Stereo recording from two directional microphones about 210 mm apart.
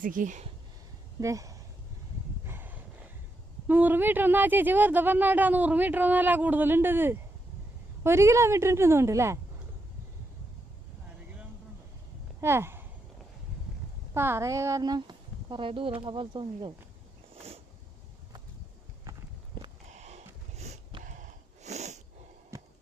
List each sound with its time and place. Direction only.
0.0 s speech: 40° right (ahead or behind)
1.2 s speech: 15° right (ahead or behind)
2.5 s a sound: 10° right (ahead or behind)
3.7 s speech: 10° right (ahead or behind)
12.4 s speech: 10° right (ahead or behind)
14.1 s speech: 10° right (ahead or behind)
17.3 s a sound: 30° right (ahead or behind)
19.6 s a sound: 40° left (ahead or behind)
19.9 s snort: 30° right (ahead or behind)
22.5 s heart sounds: 15° right (ahead or behind)